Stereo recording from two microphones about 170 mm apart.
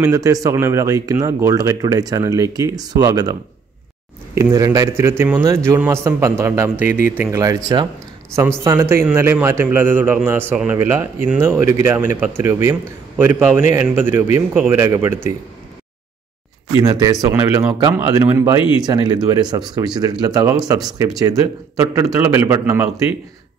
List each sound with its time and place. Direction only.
0.0 s speech: 20° right (ahead or behind)
4.4 s a man's voice: 20° right (ahead or behind)
6.9 s speech: 50° left (ahead or behind)
7.2 s a man's voice: 15° right (ahead or behind)
16.8 s a man's voice: 20° right (ahead or behind)